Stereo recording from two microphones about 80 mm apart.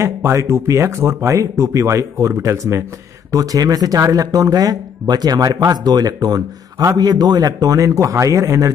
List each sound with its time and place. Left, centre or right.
0.0 s speech: right